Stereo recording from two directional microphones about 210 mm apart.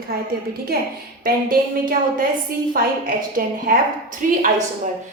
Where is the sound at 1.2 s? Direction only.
45° right (ahead or behind).